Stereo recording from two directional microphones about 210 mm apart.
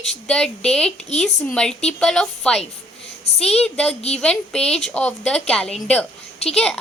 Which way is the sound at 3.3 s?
30° left (ahead or behind).